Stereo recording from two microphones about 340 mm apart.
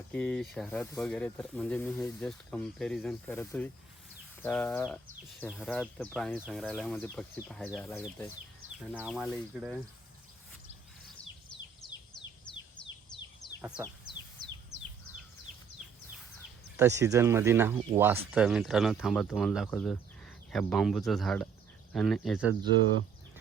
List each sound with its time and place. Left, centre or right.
0.1 s speech: centre
13.6 s speech: centre
14.7 s bird: right
15.8 s bird: centre
16.7 s speech: centre